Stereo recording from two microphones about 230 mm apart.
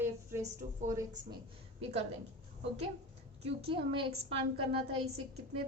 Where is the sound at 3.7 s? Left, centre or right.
Right.